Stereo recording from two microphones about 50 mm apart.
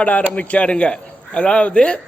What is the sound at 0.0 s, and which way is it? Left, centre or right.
A man's voice, left.